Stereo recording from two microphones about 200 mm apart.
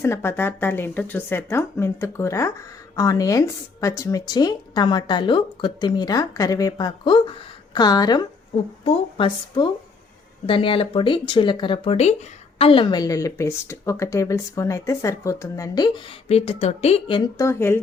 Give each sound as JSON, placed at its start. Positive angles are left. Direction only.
{"t": 0.0, "sound": "speech", "side_deg": 10}
{"t": 17.3, "sound": "speech", "side_deg": 15}